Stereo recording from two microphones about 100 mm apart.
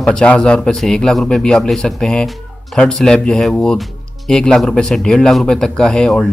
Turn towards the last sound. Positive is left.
turn(degrees=10)  # may be behind; listen again after turning